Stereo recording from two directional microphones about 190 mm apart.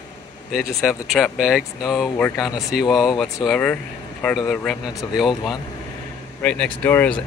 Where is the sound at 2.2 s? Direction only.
15° left (ahead or behind).